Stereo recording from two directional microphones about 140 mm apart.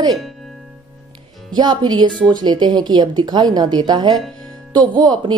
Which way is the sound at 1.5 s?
30° right (ahead or behind).